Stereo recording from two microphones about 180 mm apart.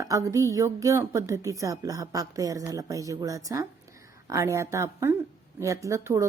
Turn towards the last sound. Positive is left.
turn(degrees=-15)  # may be behind; listen again after turning